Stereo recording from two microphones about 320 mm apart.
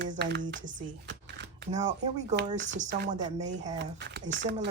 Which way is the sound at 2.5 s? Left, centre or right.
Right.